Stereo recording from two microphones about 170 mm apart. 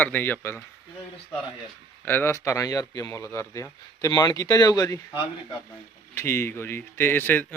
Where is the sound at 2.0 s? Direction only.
10° left (ahead or behind).